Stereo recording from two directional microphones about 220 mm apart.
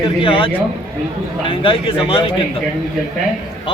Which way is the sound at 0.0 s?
25° left (ahead or behind).